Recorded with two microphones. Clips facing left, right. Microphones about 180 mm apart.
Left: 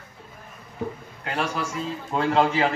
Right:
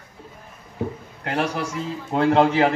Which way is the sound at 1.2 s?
60° right (ahead or behind).